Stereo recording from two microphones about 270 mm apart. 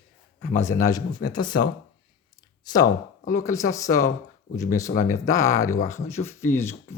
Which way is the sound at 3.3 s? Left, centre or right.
Centre.